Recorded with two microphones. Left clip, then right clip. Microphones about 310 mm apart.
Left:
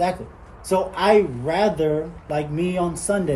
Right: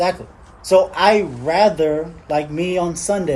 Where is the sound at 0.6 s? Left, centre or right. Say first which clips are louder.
Right 6 dB; centre.